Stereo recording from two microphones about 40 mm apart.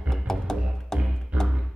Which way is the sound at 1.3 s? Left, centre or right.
Right.